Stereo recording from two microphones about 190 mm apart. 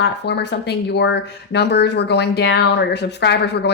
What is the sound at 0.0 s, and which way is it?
Speech, 60° left (ahead or behind).